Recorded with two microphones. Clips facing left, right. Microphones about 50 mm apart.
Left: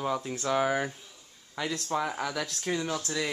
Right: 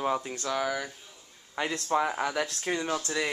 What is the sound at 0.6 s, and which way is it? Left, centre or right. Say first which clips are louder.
Speech: left 3 dB; left.